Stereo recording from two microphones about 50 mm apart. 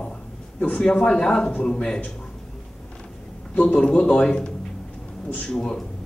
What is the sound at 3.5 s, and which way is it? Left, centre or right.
Speech, left.